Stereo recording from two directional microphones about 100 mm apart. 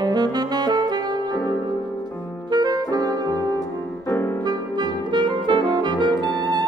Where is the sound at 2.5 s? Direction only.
40° right (ahead or behind).